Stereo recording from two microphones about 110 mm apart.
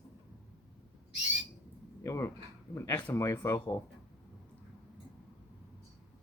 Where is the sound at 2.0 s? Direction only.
25° left (ahead or behind).